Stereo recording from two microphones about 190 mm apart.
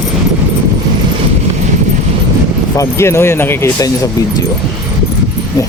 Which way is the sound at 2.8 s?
15° left (ahead or behind).